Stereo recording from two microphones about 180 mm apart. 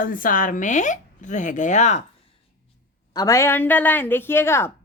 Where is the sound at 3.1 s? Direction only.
20° left (ahead or behind).